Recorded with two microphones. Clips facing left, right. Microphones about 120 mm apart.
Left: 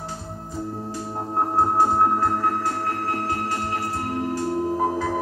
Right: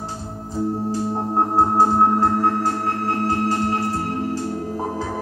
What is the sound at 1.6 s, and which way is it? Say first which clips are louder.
Music: right 2 dB; 30° right (ahead or behind).